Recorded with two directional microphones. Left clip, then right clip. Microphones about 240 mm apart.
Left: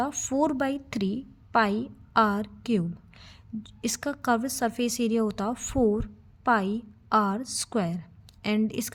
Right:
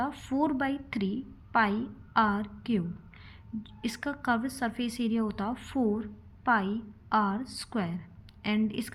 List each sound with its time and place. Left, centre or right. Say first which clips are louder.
0.0 s a woman's voice: left 4 dB; left